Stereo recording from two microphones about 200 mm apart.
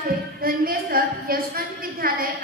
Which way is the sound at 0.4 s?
45° right (ahead or behind).